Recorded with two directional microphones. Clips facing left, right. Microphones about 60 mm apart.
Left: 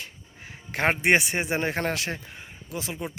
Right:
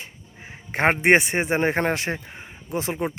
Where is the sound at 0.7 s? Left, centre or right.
Right.